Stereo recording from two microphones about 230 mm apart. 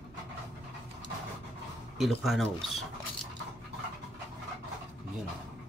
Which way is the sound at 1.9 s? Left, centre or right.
Centre.